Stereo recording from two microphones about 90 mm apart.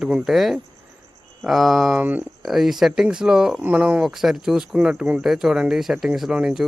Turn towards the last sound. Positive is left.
turn(degrees=-5)  # may be behind; listen again after turning